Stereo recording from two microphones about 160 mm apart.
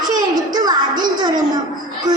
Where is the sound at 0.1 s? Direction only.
25° right (ahead or behind).